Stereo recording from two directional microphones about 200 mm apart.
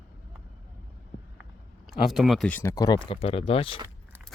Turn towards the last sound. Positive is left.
turn(degrees=30)  # may be behind; listen again after turning